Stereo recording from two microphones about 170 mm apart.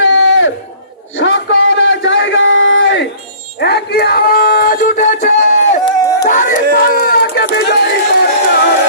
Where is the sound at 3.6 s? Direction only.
70° left (ahead or behind); by 5.8 s 45° left (ahead or behind).